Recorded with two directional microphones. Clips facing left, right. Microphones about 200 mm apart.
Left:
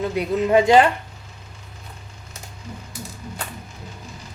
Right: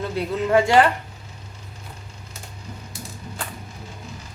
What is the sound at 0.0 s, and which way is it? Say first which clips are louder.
Speech: left 3 dB; 15° left (ahead or behind).